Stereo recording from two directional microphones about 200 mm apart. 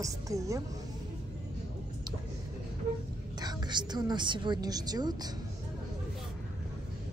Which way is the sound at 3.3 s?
20° right (ahead or behind).